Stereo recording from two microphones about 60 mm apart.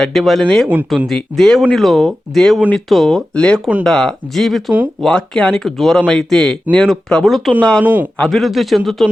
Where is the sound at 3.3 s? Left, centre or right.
Centre.